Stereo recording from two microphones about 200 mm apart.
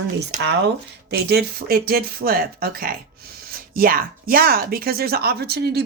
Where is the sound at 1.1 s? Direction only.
55° right (ahead or behind).